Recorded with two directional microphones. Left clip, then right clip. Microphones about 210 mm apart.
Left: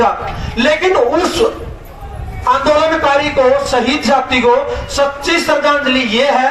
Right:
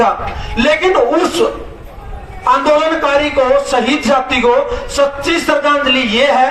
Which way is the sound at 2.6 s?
35° right (ahead or behind).